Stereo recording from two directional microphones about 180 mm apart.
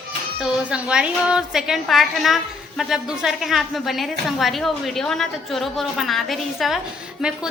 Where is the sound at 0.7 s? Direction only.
5° right (ahead or behind).